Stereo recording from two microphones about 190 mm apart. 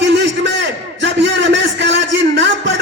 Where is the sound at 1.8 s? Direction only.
70° right (ahead or behind).